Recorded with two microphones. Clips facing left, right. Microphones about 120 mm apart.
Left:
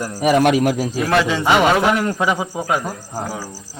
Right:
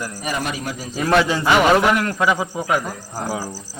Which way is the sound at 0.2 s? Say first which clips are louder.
Left 14 dB; 90° left.